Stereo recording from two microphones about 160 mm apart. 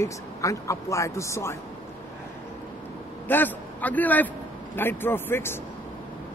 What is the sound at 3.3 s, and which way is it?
A man's voice, 10° left (ahead or behind).